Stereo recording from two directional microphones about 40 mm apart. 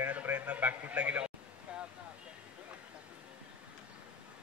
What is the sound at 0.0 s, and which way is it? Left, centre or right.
A man's voice, right.